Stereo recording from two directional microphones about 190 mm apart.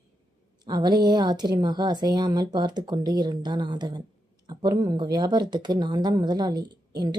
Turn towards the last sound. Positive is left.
turn(degrees=-20)  # may be behind; listen again after turning